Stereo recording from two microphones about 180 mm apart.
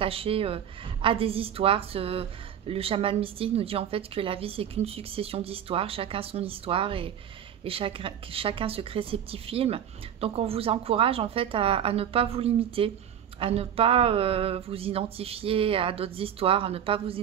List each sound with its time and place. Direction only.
0.0 s a woman's voice: 30° right (ahead or behind)